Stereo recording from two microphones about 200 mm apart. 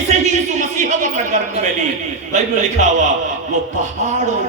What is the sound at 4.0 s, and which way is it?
Speech, 40° right (ahead or behind).